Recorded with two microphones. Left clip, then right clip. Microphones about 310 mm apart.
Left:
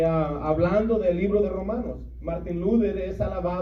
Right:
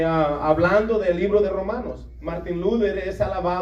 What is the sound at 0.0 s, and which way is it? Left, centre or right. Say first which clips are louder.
A man's voice: right 4 dB; right.